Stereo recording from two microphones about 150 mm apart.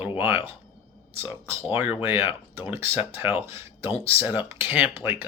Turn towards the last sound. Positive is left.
turn(degrees=-15)  # may be behind; listen again after turning